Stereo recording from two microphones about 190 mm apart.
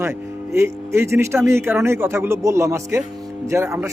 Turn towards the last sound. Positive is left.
turn(degrees=-15)  # may be behind; listen again after turning